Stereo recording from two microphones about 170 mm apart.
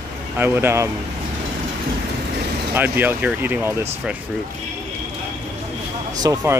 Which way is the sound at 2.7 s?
10° right (ahead or behind).